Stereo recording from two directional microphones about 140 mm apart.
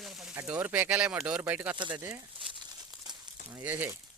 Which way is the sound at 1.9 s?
20° right (ahead or behind).